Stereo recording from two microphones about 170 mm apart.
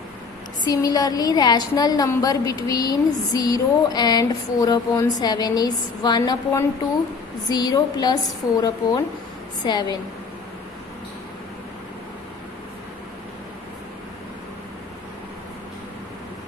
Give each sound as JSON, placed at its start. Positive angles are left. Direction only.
{"t": 0.6, "sound": "a woman's voice", "side_deg": 25}